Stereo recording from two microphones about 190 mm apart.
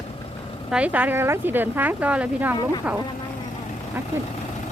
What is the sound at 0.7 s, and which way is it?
Speech, 5° right (ahead or behind).